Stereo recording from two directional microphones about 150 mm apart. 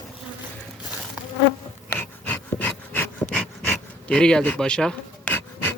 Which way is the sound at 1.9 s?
10° left (ahead or behind).